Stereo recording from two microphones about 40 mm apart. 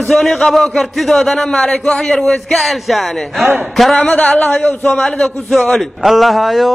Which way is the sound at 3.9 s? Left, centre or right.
Left.